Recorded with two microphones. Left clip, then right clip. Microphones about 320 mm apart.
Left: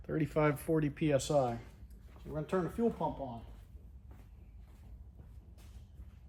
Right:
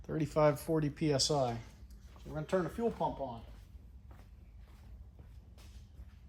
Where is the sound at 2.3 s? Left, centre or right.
Right.